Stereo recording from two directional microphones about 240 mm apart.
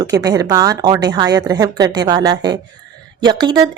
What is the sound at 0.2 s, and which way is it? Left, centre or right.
A woman's voice, centre.